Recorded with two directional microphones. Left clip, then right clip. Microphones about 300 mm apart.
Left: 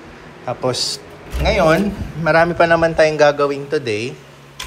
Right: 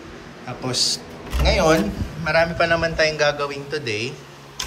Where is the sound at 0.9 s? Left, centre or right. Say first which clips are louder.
Even; right.